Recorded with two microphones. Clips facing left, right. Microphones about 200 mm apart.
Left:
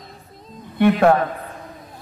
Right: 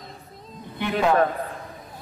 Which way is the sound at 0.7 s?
60° left (ahead or behind).